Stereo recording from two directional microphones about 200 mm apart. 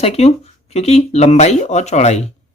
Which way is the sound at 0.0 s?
30° left (ahead or behind).